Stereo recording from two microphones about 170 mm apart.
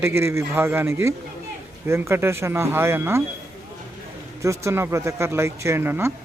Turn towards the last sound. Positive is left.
turn(degrees=-15)  # may be behind; listen again after turning